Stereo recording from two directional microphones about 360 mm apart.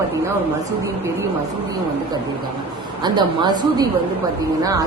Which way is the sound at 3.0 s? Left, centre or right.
Centre.